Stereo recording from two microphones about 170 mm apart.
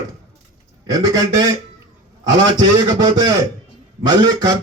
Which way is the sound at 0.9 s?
20° right (ahead or behind).